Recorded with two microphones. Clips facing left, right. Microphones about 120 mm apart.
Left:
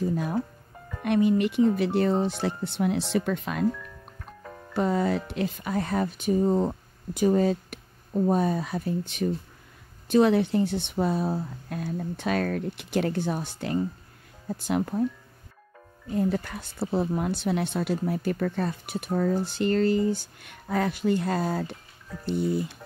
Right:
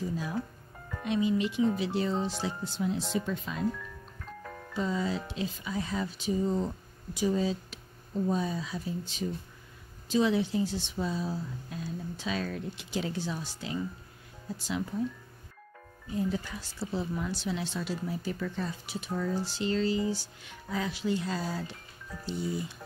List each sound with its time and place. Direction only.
0.0 s speech: 55° left (ahead or behind)
4.7 s speech: 60° left (ahead or behind)
16.1 s speech: 60° left (ahead or behind)